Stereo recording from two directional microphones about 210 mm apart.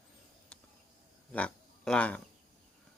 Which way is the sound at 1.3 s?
5° left (ahead or behind).